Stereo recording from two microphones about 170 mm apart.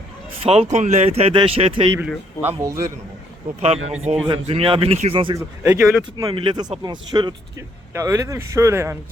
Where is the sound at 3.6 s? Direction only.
40° right (ahead or behind).